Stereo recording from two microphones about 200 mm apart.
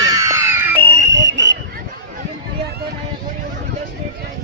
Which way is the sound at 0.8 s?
60° right (ahead or behind).